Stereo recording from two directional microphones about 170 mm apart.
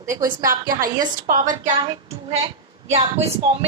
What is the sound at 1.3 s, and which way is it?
A woman's voice, 50° right (ahead or behind).